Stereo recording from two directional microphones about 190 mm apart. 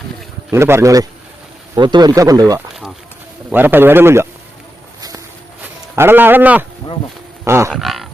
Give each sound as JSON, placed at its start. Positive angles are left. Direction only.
{"t": 0.5, "sound": "speech", "side_deg": -15}
{"t": 6.0, "sound": "speech", "side_deg": -10}
{"t": 7.4, "sound": "wild animals", "side_deg": -15}
{"t": 7.7, "sound": "roaring cats", "side_deg": 0}